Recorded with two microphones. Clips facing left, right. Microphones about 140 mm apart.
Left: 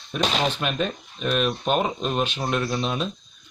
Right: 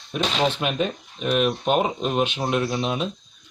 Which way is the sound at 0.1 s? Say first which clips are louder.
Right 1 dB; 15° right (ahead or behind).